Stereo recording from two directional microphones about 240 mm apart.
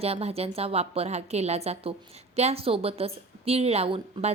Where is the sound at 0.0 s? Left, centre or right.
Right.